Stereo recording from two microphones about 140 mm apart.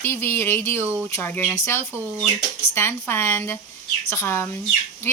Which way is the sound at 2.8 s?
15° left (ahead or behind).